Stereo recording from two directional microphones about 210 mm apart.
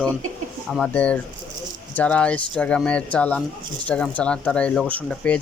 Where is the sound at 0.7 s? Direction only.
5° left (ahead or behind).